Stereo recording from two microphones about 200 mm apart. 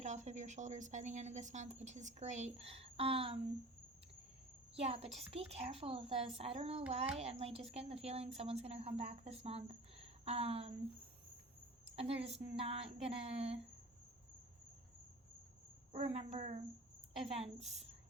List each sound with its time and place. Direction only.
0.0 s speech: 35° right (ahead or behind)
4.7 s a woman's voice: 30° right (ahead or behind)
11.9 s a woman's voice: 30° right (ahead or behind)
15.9 s speech: 30° right (ahead or behind)